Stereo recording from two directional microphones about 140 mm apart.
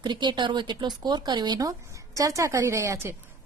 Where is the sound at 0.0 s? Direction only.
35° right (ahead or behind).